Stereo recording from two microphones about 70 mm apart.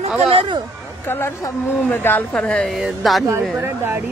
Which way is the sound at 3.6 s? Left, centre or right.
Right.